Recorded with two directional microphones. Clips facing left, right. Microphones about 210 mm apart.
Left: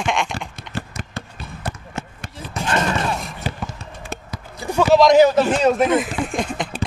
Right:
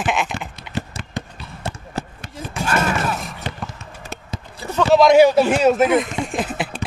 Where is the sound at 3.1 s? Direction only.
Centre (ahead or behind).